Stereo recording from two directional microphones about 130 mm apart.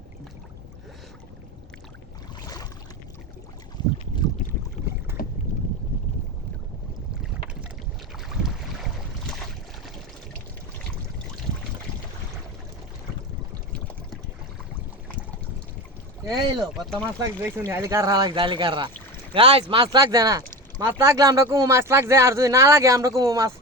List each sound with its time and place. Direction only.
2.4 s boat: 30° left (ahead or behind)
5.2 s boat: 90° left
8.3 s boat: centre (ahead or behind)
16.2 s speech: 35° right (ahead or behind)
16.7 s speech: centre (ahead or behind)
17.4 s speech: 20° right (ahead or behind)